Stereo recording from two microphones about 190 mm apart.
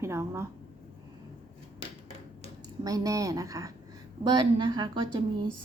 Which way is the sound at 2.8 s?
20° right (ahead or behind).